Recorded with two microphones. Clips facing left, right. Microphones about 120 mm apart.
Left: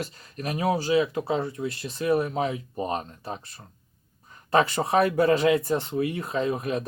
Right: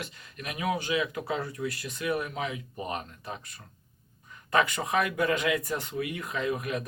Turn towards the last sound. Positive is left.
turn(degrees=30)  # may be behind; listen again after turning